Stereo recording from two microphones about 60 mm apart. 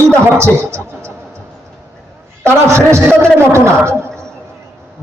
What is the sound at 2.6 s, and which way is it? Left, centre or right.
A man's voice, right.